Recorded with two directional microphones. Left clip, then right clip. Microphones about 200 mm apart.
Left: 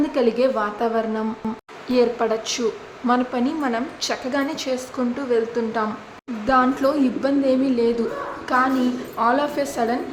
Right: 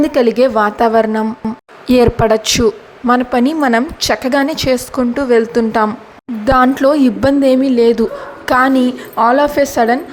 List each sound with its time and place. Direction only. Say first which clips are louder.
0.0 s a woman's voice: right 8 dB; 35° right (ahead or behind)